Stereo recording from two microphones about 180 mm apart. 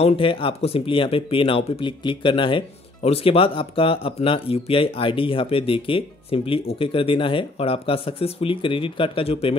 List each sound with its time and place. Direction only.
0.0 s speech: 30° left (ahead or behind)